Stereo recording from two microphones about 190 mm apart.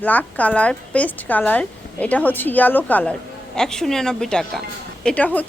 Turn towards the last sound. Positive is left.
turn(degrees=10)  # may be behind; listen again after turning